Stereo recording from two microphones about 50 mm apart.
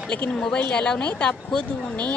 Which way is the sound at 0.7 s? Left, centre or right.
Left.